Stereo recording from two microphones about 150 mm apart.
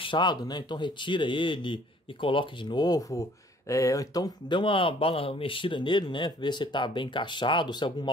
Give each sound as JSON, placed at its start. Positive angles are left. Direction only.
{"t": 0.0, "sound": "speech", "side_deg": 30}